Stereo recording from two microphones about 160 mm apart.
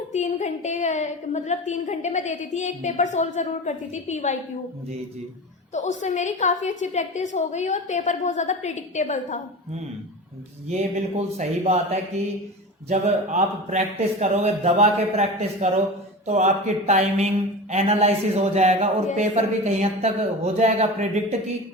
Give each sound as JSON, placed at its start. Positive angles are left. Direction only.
{"t": 0.1, "sound": "a woman's voice", "side_deg": 50}
{"t": 5.7, "sound": "a woman's voice", "side_deg": 45}
{"t": 10.7, "sound": "a man's voice", "side_deg": -45}